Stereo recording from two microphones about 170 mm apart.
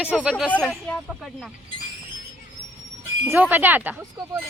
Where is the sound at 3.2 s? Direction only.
10° right (ahead or behind).